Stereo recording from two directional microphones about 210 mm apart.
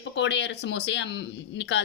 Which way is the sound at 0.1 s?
55° left (ahead or behind).